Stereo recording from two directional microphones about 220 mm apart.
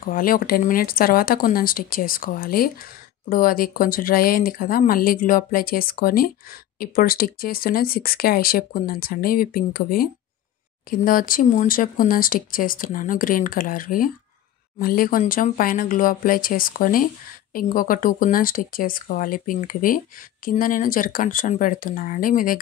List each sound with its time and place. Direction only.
0.0 s speech: 40° left (ahead or behind)